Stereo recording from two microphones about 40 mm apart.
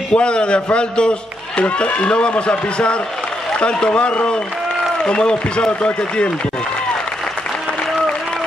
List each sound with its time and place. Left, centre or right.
0.1 s a man's voice: left